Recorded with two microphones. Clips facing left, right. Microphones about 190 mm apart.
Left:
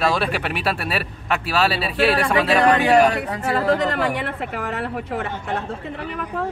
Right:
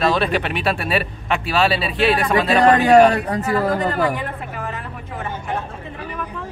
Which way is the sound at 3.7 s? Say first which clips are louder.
Even; 75° left (ahead or behind).